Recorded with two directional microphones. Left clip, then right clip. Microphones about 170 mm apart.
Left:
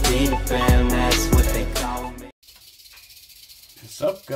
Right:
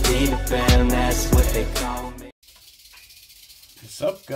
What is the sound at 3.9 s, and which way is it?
Speech, 5° right (ahead or behind).